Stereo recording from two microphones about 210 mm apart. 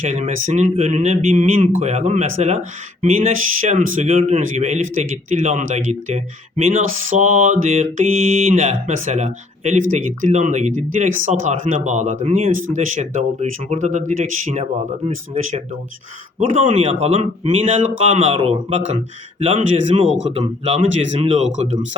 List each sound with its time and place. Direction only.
0.0 s speech: 35° right (ahead or behind)